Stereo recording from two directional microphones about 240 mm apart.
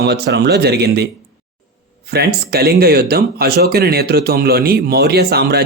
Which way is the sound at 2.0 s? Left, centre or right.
Right.